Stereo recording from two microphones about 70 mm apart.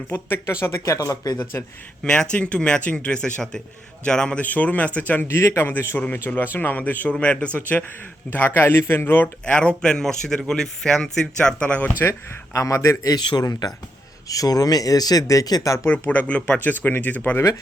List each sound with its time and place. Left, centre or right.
0.1 s speech: left
0.9 s speech: left
1.1 s speech: left
2.0 s a man's voice: centre
5.3 s speech: left
9.5 s a man's voice: centre
12.5 s speech: left
15.9 s speech: left